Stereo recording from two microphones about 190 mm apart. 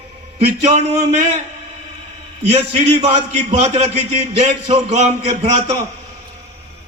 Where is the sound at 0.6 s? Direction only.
35° right (ahead or behind).